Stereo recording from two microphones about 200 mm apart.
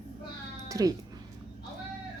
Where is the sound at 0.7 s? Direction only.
15° right (ahead or behind).